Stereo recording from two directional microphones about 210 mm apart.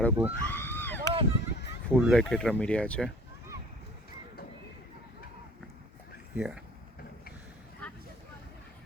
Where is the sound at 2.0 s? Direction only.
Centre (ahead or behind).